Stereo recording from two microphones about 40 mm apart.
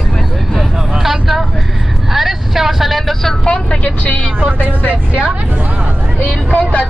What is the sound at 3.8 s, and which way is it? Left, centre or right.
Vehicle, left.